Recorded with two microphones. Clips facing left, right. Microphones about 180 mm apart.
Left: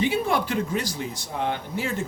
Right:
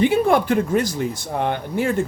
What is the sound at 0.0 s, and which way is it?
Speech, 55° right (ahead or behind).